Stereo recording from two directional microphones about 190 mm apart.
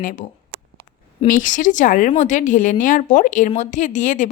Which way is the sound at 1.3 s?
45° left (ahead or behind).